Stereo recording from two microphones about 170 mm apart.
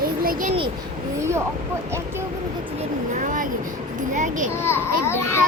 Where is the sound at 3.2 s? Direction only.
50° right (ahead or behind).